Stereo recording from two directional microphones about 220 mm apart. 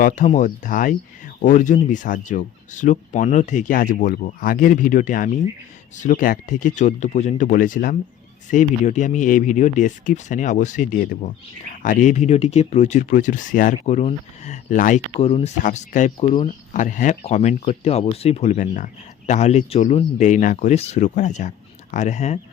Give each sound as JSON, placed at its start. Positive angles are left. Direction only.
{"t": 0.0, "sound": "speech", "side_deg": 35}